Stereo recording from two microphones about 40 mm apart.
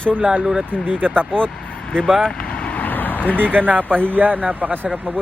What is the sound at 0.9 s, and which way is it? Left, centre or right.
Speech, right.